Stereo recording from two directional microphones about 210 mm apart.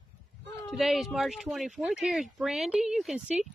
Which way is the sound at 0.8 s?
Centre (ahead or behind).